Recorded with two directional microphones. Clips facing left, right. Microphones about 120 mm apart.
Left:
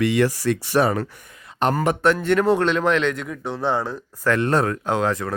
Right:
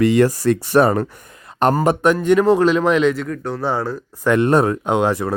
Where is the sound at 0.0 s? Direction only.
45° right (ahead or behind).